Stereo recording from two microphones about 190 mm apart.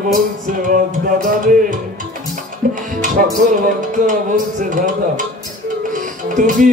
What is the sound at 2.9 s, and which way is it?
Speech, 45° right (ahead or behind).